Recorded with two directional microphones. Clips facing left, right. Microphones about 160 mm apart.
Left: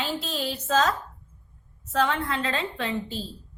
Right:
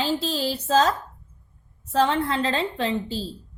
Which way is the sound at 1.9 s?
30° right (ahead or behind).